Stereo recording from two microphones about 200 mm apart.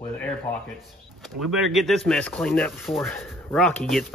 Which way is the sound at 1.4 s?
Centre (ahead or behind).